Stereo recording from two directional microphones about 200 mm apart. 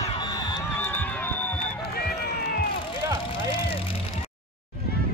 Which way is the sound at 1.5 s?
50° left (ahead or behind).